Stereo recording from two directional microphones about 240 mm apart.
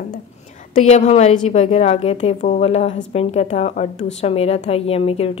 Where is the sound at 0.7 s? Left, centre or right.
Left.